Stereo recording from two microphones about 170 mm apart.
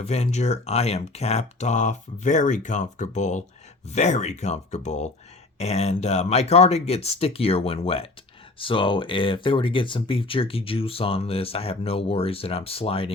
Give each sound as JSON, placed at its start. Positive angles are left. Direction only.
{"t": 0.0, "sound": "speech", "side_deg": 40}